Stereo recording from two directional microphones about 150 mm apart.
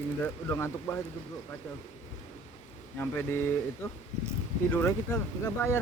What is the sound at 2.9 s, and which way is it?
Speech, 15° left (ahead or behind).